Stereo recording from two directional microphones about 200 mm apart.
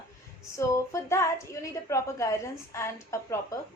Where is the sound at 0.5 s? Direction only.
15° left (ahead or behind).